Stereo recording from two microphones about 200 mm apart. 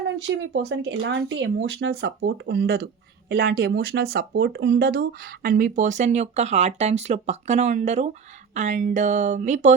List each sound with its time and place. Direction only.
0.0 s speech: 70° right (ahead or behind); by 9.7 s 35° right (ahead or behind)